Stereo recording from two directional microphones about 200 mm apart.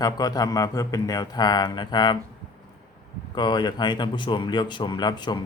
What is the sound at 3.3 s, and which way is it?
A man's voice, 20° left (ahead or behind).